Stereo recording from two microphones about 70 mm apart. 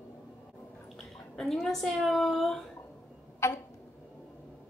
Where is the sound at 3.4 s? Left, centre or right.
Left.